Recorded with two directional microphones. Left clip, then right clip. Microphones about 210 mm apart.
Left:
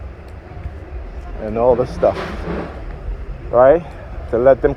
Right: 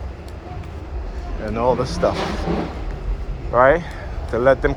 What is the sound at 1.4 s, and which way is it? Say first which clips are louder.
Speech: left 5 dB; 40° left (ahead or behind).